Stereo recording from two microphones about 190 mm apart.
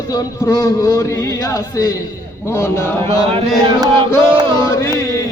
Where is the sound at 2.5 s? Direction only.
15° left (ahead or behind).